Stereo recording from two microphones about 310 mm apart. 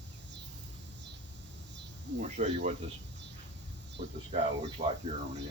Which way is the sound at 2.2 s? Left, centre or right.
Right.